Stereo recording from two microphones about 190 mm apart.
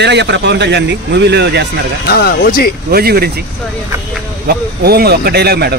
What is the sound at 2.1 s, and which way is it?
Speech, 55° left (ahead or behind).